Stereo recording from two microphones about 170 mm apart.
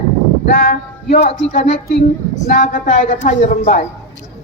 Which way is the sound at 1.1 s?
40° left (ahead or behind).